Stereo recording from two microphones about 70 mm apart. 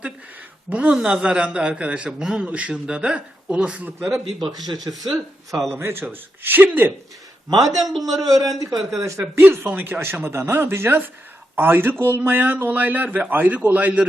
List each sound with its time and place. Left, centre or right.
0.7 s a man's voice: centre
4.5 s speech: right
5.7 s speech: right
7.8 s a man's voice: centre
8.1 s speech: right
9.0 s speech: right
9.4 s a man's voice: right